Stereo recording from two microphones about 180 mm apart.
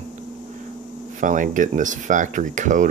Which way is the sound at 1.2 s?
45° right (ahead or behind).